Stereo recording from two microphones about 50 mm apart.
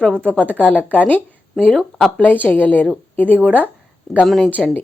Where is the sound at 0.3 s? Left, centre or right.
Left.